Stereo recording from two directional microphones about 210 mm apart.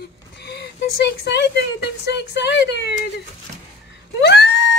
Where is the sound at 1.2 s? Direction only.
55° left (ahead or behind).